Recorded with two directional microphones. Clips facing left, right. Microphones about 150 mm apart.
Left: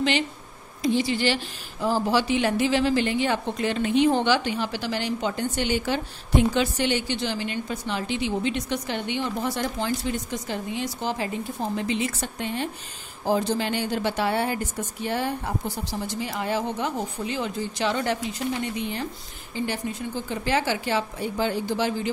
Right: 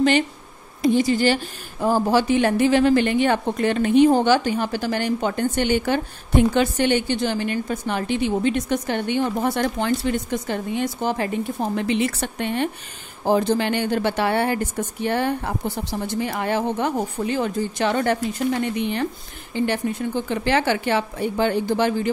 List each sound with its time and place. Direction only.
0.8 s a woman's voice: 45° right (ahead or behind)